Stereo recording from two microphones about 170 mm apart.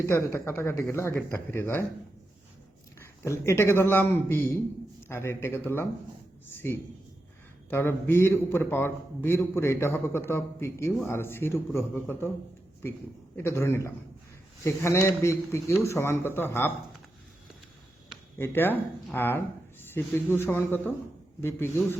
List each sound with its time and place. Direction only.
0.0 s a man's voice: 15° left (ahead or behind)
3.0 s a man's voice: 15° left (ahead or behind)
13.3 s a man's voice: 15° left (ahead or behind)
18.3 s a man's voice: 15° left (ahead or behind)